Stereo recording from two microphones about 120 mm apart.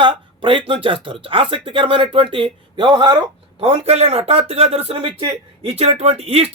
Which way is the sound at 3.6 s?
55° right (ahead or behind).